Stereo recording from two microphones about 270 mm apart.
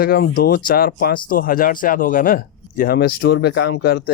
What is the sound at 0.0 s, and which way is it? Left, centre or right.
Speech, left.